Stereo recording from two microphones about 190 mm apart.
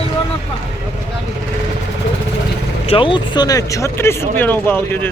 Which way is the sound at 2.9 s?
25° left (ahead or behind).